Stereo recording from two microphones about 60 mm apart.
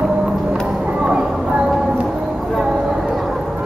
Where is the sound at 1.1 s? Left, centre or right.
Centre.